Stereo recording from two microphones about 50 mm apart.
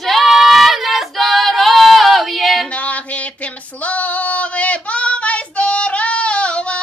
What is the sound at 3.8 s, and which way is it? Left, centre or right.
Female singing, left.